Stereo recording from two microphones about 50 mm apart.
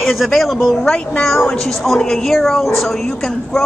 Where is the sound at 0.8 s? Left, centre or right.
Centre.